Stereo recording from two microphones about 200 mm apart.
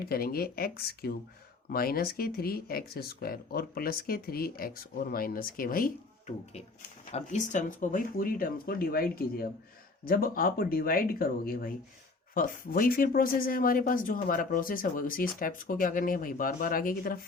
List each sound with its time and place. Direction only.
0.0 s speech: 50° left (ahead or behind)